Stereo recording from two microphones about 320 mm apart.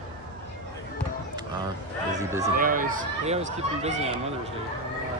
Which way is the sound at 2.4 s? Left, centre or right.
Right.